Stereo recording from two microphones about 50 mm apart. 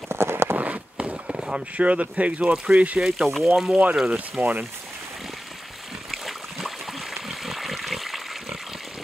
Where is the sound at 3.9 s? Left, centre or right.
Centre.